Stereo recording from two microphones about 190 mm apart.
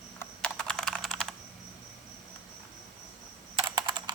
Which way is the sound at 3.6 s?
25° right (ahead or behind).